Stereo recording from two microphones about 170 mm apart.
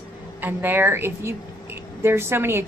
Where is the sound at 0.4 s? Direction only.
10° right (ahead or behind).